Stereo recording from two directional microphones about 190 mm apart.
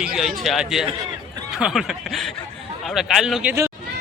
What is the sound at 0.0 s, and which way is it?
A man's voice, centre (ahead or behind).